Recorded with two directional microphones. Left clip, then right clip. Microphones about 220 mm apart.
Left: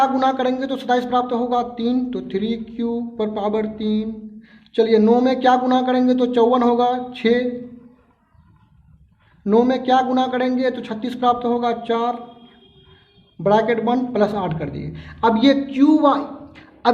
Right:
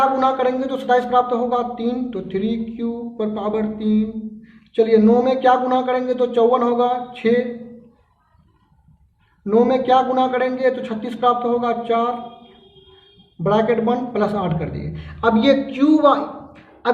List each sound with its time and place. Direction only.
0.0 s a man's voice: 35° left (ahead or behind)
9.4 s a man's voice: 30° left (ahead or behind)
13.4 s a man's voice: 30° left (ahead or behind)